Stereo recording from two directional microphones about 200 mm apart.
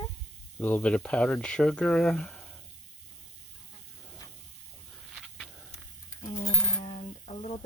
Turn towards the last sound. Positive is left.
turn(degrees=30)  # may be behind; listen again after turning